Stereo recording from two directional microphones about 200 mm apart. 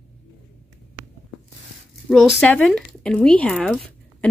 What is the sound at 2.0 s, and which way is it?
Speech, centre (ahead or behind).